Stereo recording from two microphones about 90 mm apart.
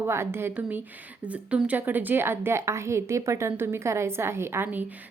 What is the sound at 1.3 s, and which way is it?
A woman's voice, 15° right (ahead or behind).